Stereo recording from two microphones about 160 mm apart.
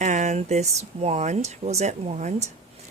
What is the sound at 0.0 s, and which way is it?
Speech, 50° right (ahead or behind).